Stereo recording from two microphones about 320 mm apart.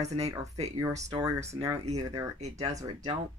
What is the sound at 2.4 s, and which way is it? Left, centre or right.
Speech, right.